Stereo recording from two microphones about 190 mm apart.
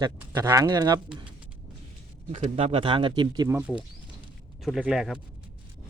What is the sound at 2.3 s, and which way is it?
Speech, 35° right (ahead or behind).